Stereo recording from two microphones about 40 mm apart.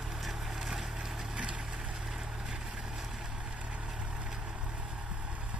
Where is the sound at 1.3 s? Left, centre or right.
Right.